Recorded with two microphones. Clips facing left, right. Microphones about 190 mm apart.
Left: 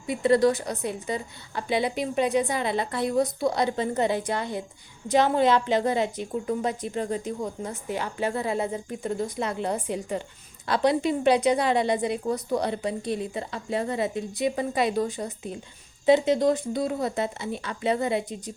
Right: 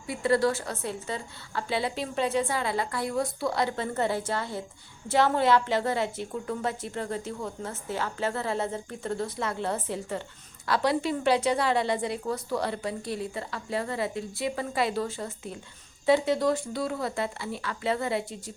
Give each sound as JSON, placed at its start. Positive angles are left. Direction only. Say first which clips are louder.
{"t": 0.1, "sound": "a woman's voice", "louder": "left 4 dB", "side_deg": 20}